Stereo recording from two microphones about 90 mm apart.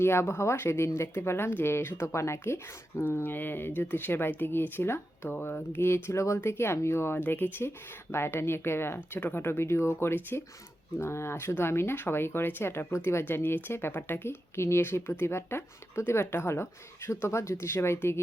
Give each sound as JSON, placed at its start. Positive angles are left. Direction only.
{"t": 0.0, "sound": "speech", "side_deg": 30}